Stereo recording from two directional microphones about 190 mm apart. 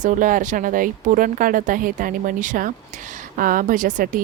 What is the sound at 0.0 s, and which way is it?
Speech, 45° right (ahead or behind).